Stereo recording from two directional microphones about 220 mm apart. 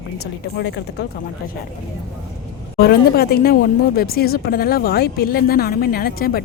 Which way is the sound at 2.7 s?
45° left (ahead or behind).